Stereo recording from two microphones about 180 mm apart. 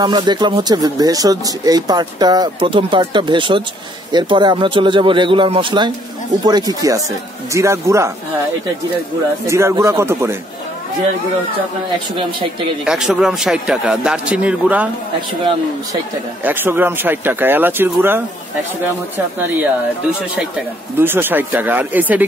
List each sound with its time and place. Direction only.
0.0 s speech: 25° right (ahead or behind)
9.5 s speech: 15° right (ahead or behind)
12.8 s a man's voice: 5° right (ahead or behind)
16.4 s speech: 10° right (ahead or behind)
21.0 s speech: 10° right (ahead or behind)